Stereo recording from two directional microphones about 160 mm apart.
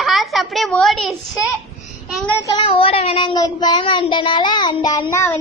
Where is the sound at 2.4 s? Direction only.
35° left (ahead or behind).